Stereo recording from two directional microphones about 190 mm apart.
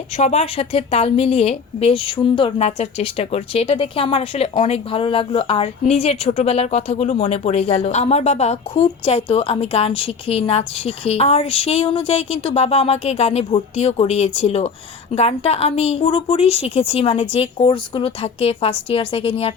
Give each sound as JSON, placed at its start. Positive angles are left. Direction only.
{"t": 0.2, "sound": "a woman's voice", "side_deg": 35}